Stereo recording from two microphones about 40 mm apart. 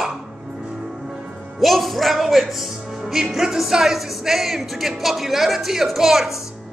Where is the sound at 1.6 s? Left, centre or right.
Centre.